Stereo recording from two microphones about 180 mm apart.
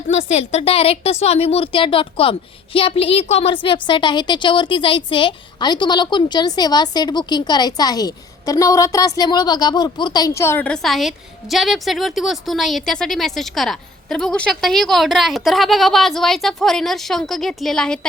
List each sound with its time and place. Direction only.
0.1 s a woman's voice: 35° left (ahead or behind); by 18.0 s 5° left (ahead or behind)